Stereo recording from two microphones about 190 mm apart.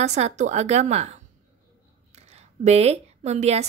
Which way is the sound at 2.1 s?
35° right (ahead or behind).